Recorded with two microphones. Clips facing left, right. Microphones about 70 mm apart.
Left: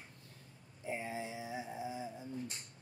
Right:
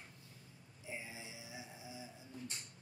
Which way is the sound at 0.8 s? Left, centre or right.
Left.